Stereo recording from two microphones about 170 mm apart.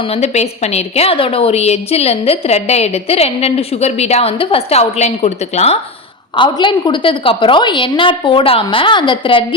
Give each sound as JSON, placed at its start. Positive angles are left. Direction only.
{"t": 0.1, "sound": "a woman's voice", "side_deg": 40}
{"t": 6.3, "sound": "a woman's voice", "side_deg": 30}